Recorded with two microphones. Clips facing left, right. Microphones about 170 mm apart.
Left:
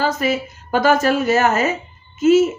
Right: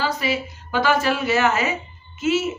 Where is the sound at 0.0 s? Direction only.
45° left (ahead or behind).